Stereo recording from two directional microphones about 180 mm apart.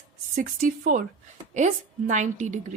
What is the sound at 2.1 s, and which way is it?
Speech, 40° right (ahead or behind).